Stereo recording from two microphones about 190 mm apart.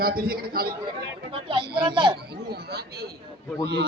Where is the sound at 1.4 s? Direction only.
25° right (ahead or behind).